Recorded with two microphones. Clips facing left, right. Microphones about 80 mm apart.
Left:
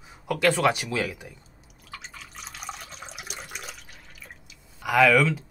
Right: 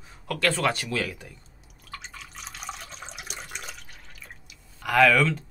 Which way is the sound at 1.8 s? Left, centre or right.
Centre.